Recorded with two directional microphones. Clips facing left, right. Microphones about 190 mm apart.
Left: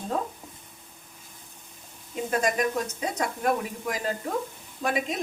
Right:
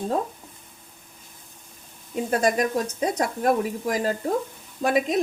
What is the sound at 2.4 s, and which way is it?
Speech, 35° right (ahead or behind).